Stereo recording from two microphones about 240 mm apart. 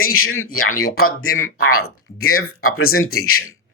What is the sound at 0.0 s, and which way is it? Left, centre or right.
Speech, left.